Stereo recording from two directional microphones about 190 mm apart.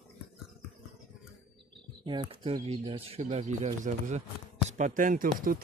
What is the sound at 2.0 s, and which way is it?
Speech, 25° right (ahead or behind).